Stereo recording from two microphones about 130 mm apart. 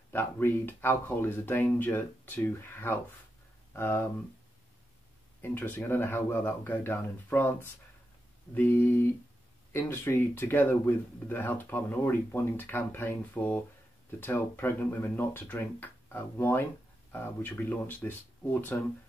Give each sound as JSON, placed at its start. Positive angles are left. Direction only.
{"t": 0.1, "sound": "speech", "side_deg": 15}
{"t": 5.4, "sound": "speech", "side_deg": 15}